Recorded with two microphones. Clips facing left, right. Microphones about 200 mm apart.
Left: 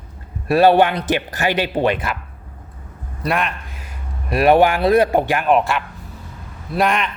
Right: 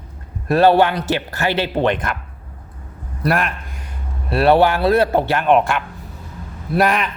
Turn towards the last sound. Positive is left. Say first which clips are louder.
# right 1 dB
turn(degrees=0)  # may be behind; listen again after turning